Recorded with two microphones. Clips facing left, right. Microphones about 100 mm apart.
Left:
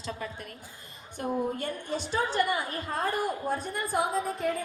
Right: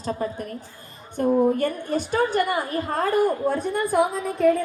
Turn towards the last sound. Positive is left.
turn(degrees=-65)  # may be behind; listen again after turning